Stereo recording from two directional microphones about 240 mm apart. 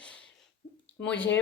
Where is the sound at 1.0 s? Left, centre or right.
Centre.